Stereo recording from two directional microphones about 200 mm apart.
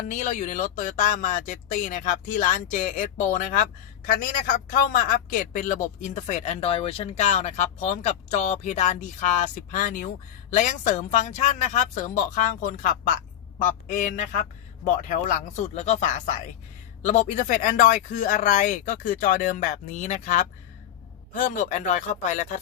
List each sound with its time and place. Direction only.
0.1 s speech: 35° left (ahead or behind)